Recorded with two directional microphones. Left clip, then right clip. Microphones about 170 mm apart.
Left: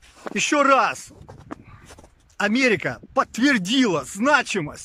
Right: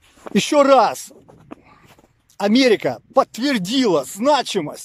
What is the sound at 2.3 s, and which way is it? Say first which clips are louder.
Speech: right 4 dB; 25° right (ahead or behind).